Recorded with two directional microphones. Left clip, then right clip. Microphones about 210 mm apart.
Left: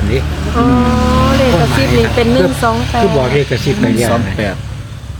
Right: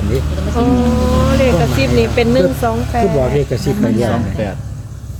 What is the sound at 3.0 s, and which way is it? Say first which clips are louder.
Speech: left 2 dB; 30° left (ahead or behind).